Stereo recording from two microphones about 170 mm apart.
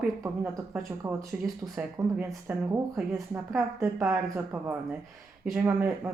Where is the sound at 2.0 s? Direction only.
20° right (ahead or behind).